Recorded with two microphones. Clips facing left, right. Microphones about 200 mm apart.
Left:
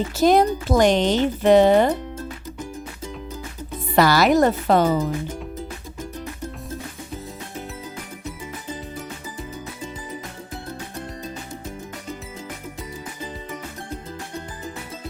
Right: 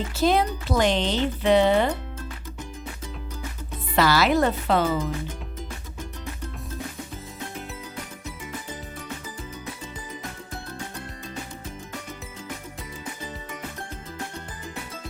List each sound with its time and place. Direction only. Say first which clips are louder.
0.2 s speech: left 5 dB; 45° left (ahead or behind)
3.9 s speech: left 4 dB; 45° left (ahead or behind)